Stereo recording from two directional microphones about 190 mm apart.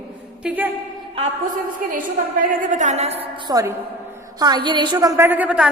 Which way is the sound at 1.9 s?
45° right (ahead or behind).